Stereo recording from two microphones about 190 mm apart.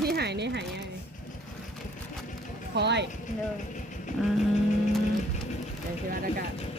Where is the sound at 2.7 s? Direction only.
65° right (ahead or behind).